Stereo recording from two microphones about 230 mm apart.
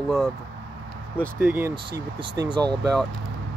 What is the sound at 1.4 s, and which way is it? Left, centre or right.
Speech, centre.